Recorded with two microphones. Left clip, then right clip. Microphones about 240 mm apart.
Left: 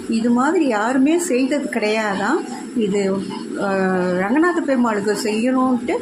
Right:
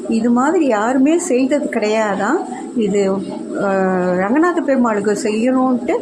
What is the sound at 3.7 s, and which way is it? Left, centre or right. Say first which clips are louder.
A woman's voice: right 3 dB; centre.